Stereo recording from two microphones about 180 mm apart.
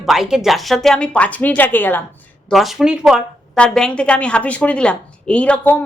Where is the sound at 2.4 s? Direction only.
Centre (ahead or behind).